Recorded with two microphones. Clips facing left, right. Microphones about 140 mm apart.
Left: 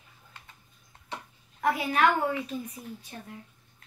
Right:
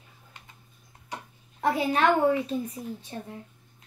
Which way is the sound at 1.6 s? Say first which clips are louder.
Right 1 dB; 30° right (ahead or behind).